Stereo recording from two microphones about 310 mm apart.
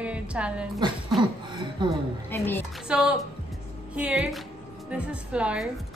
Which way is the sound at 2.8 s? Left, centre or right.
Centre.